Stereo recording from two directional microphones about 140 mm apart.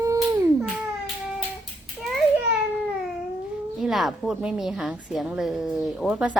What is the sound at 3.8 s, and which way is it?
A woman's voice, centre (ahead or behind).